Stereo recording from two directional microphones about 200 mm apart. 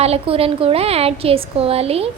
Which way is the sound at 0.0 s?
30° right (ahead or behind).